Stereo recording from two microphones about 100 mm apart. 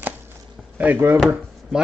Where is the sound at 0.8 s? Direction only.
20° right (ahead or behind).